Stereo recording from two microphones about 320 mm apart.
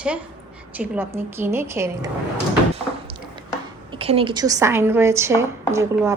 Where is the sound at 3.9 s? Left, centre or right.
Centre.